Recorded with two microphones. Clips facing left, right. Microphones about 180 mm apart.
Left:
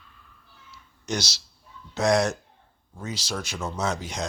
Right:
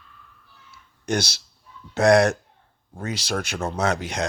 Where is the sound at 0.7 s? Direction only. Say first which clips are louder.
Right 5 dB; 55° right (ahead or behind).